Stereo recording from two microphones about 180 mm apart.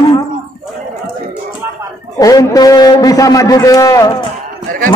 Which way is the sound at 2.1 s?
20° left (ahead or behind).